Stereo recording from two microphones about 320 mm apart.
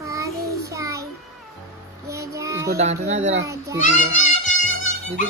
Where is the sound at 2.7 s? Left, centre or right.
Right.